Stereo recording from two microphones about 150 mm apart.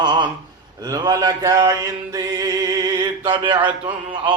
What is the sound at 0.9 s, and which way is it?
Speech, 25° right (ahead or behind).